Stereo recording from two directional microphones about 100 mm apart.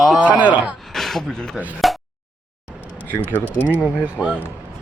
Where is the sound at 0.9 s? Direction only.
5° left (ahead or behind).